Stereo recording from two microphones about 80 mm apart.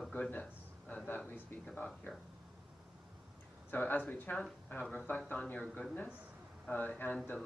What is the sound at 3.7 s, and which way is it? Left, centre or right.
Speech, left.